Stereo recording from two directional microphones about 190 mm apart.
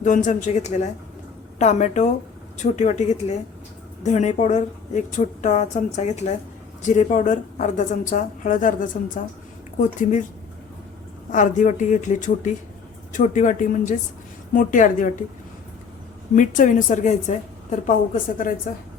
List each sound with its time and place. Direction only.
0.0 s a woman's voice: 40° left (ahead or behind)
11.3 s a woman's voice: 40° left (ahead or behind)
16.3 s a woman's voice: 40° left (ahead or behind)